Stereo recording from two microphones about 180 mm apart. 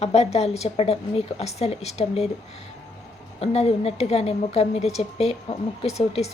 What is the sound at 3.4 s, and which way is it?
A woman's voice, 35° left (ahead or behind).